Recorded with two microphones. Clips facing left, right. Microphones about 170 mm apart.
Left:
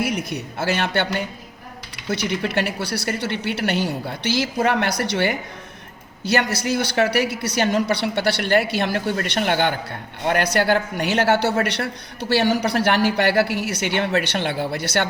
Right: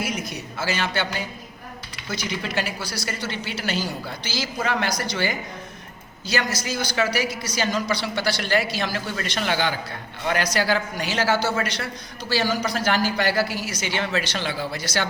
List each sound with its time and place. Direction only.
0.0 s a woman's voice: 60° left (ahead or behind)